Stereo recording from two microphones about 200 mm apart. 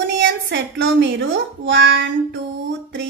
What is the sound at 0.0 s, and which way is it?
A woman's voice, 60° right (ahead or behind).